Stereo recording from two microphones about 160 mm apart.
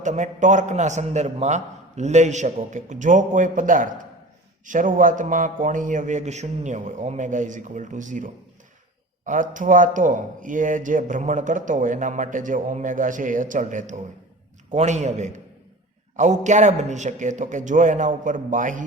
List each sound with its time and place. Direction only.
0.0 s speech: 50° right (ahead or behind)